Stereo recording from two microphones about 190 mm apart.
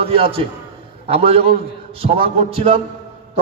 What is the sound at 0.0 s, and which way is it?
A man's voice, 30° right (ahead or behind).